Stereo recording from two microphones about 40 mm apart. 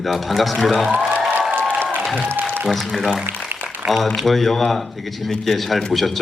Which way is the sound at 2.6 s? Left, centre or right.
Centre.